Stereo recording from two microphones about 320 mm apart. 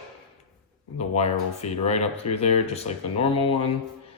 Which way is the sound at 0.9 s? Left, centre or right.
Centre.